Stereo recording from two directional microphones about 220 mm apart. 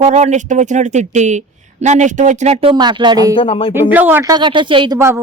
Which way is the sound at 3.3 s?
25° left (ahead or behind).